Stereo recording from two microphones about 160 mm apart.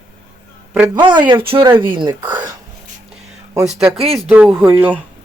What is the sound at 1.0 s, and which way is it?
A woman's voice, 30° right (ahead or behind).